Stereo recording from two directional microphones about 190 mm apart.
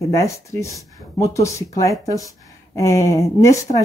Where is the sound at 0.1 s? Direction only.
15° left (ahead or behind).